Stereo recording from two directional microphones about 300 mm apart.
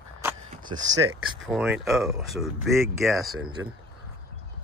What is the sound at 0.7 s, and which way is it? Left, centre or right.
Speech, centre.